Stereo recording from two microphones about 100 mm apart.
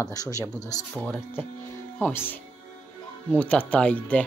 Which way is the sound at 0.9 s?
10° left (ahead or behind).